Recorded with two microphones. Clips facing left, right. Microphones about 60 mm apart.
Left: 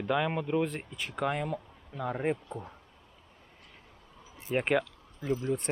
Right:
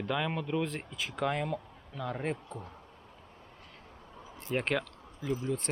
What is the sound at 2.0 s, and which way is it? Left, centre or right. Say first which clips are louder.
Speech: left 4 dB; centre.